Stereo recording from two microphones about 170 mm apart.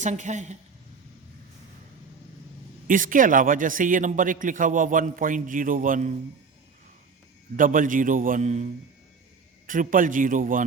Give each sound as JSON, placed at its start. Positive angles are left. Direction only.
{"t": 0.0, "sound": "a man's voice", "side_deg": -45}
{"t": 2.8, "sound": "a man's voice", "side_deg": -55}
{"t": 7.5, "sound": "a man's voice", "side_deg": -50}
{"t": 9.6, "sound": "a man's voice", "side_deg": -50}